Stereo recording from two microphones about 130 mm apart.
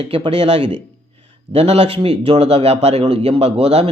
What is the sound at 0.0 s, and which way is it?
Speech, 45° right (ahead or behind).